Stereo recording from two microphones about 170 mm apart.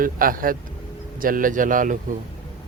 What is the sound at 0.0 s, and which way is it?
A man's voice, 55° right (ahead or behind).